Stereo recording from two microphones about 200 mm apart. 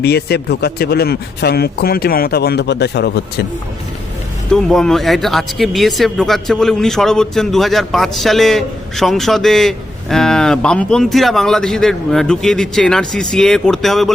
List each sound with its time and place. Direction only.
0.0 s a man's voice: 55° left (ahead or behind)
4.5 s speech: centre (ahead or behind)